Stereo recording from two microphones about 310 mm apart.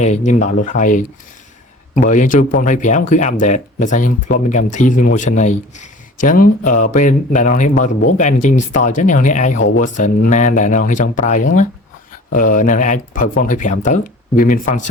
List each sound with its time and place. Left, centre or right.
0.3 s speech: left